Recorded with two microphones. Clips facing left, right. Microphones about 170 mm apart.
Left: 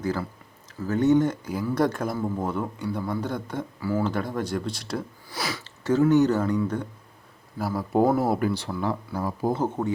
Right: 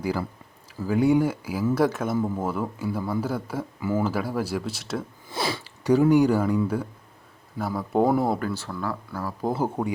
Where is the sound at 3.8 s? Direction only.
20° right (ahead or behind).